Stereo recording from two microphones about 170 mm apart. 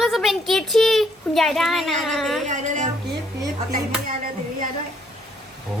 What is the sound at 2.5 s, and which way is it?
Music, 45° right (ahead or behind).